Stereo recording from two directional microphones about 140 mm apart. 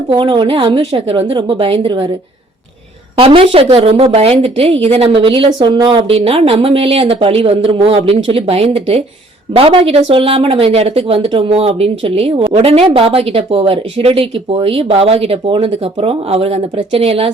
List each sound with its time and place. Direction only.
0.2 s a woman's voice: 35° right (ahead or behind)
3.2 s speech: 40° right (ahead or behind)